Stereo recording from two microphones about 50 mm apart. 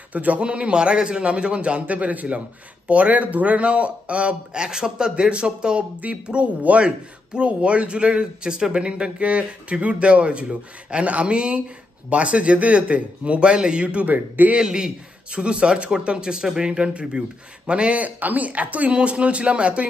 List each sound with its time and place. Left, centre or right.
0.1 s speech: right
14.0 s speech: right
14.6 s speech: centre